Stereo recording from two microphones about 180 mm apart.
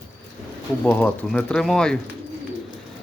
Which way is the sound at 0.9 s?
5° left (ahead or behind).